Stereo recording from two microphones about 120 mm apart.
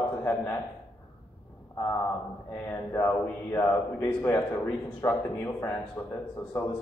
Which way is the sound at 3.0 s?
20° left (ahead or behind).